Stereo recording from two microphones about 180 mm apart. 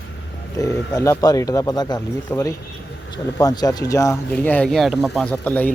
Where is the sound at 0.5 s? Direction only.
15° left (ahead or behind).